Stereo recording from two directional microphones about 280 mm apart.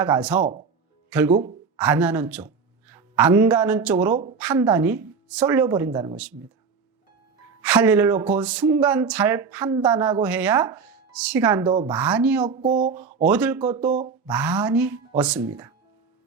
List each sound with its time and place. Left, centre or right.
0.0 s speech: centre
0.3 s speech: right
1.7 s speech: centre
7.6 s speech: centre
11.6 s speech: centre
11.9 s speech: centre
12.5 s speech: right
13.2 s speech: centre
13.7 s speech: right
14.3 s speech: centre